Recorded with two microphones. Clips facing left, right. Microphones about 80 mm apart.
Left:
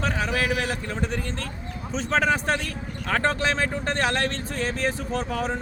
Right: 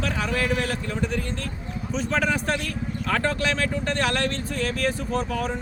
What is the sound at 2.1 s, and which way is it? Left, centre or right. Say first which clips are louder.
Speech: left 3 dB; left.